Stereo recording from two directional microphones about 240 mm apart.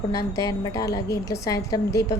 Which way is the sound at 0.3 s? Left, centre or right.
Centre.